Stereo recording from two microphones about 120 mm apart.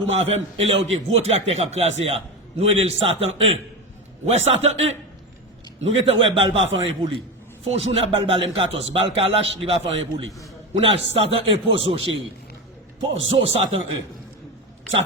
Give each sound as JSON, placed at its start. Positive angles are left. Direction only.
{"t": 0.2, "sound": "a man's voice", "side_deg": -60}
{"t": 13.3, "sound": "a man's voice", "side_deg": -60}